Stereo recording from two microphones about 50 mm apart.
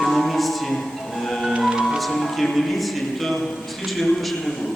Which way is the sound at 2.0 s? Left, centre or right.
Centre.